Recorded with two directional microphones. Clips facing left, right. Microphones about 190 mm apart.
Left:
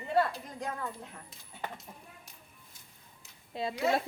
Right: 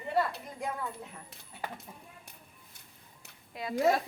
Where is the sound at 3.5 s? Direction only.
25° left (ahead or behind).